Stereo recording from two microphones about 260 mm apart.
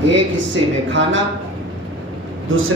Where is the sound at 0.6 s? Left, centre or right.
Centre.